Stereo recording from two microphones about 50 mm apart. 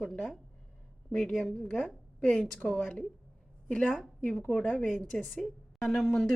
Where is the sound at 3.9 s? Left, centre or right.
Centre.